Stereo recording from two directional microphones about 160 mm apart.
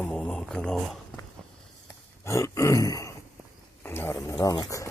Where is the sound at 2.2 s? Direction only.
20° left (ahead or behind).